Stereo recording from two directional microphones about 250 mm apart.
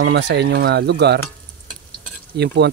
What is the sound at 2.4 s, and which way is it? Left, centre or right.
Speech, right.